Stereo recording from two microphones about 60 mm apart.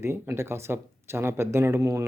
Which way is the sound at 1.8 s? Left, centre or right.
Right.